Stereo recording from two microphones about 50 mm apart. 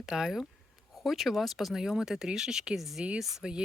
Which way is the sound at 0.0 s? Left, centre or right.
Centre.